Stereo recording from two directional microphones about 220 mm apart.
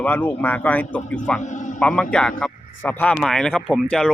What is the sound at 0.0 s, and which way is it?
Speech, 10° left (ahead or behind).